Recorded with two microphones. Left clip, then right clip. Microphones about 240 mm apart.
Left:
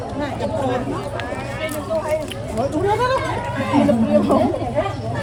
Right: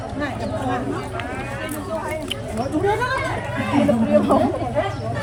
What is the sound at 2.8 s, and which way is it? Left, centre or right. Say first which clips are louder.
Speech: left 2 dB; left.